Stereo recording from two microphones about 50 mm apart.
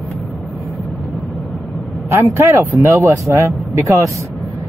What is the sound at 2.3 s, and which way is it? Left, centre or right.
Speech, right.